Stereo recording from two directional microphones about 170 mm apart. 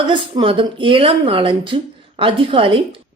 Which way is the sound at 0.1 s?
30° right (ahead or behind).